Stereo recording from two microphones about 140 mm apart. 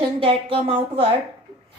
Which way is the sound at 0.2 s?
40° right (ahead or behind).